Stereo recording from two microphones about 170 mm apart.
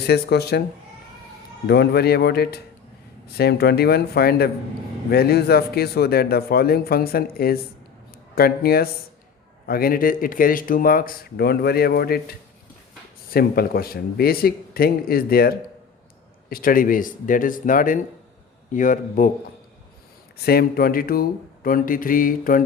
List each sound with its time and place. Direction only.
0.1 s speech: 75° left (ahead or behind)
1.6 s speech: 75° left (ahead or behind)
13.3 s speech: 65° left (ahead or behind)
20.4 s speech: 65° left (ahead or behind)